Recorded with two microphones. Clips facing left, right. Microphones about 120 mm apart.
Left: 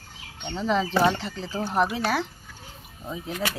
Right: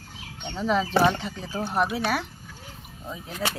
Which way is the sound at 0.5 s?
5° right (ahead or behind).